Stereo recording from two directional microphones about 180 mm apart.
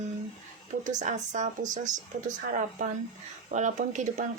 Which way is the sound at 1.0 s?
45° right (ahead or behind).